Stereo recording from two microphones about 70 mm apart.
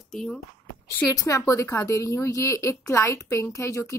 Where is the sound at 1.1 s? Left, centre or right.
Left.